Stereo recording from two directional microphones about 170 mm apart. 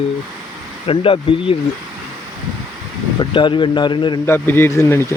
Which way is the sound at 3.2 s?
30° left (ahead or behind).